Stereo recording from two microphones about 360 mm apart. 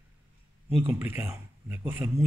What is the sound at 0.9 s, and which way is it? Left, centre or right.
A man's voice, centre.